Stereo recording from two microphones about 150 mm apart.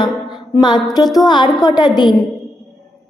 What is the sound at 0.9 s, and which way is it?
Music, 25° left (ahead or behind).